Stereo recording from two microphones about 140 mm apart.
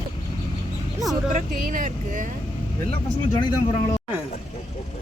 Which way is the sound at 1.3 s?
75° right (ahead or behind).